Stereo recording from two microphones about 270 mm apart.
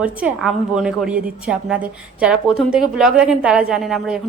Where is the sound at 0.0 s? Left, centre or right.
Centre.